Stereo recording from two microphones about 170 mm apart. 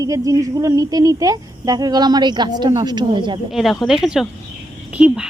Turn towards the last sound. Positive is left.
turn(degrees=-5)  # may be behind; listen again after turning